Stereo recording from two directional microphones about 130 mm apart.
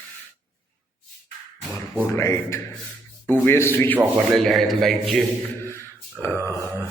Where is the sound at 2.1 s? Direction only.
20° left (ahead or behind).